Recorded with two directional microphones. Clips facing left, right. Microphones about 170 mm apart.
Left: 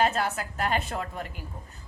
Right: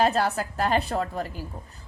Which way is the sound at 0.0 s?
35° right (ahead or behind).